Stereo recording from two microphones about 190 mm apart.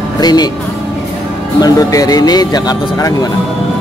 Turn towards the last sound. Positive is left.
turn(degrees=20)  # may be behind; listen again after turning